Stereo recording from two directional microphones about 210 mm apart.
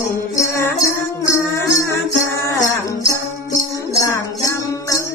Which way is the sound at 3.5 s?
15° left (ahead or behind).